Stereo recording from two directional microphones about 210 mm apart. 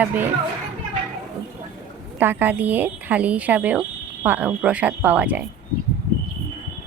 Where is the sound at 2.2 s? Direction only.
10° right (ahead or behind).